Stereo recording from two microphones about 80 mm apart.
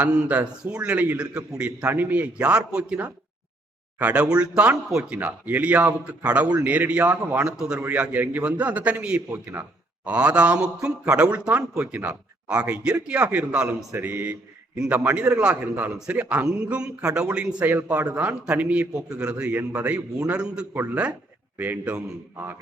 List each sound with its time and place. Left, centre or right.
0.0 s a man's voice: centre
5.1 s a man's voice: right
13.9 s speech: right
14.8 s a man's voice: centre
17.7 s a man's voice: right